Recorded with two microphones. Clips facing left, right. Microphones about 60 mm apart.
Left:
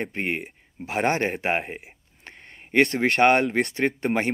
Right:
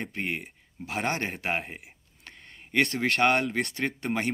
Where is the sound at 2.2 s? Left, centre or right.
Left.